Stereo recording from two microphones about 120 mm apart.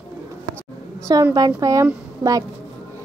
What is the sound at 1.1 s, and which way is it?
Speech, 35° right (ahead or behind).